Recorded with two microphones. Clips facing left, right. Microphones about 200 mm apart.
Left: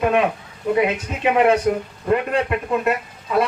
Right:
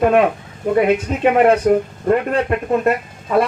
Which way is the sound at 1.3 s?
45° right (ahead or behind).